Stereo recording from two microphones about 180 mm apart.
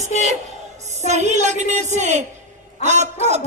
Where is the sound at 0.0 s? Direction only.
40° right (ahead or behind).